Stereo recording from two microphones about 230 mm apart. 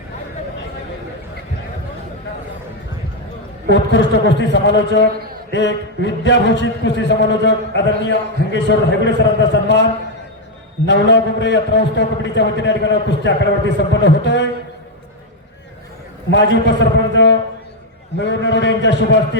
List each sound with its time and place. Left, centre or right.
3.7 s a man's voice: left
10.8 s a man's voice: left
16.3 s a man's voice: left